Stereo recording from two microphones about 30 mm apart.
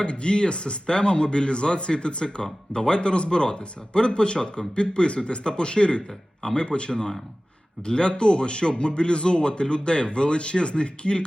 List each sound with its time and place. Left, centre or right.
0.0 s speech: left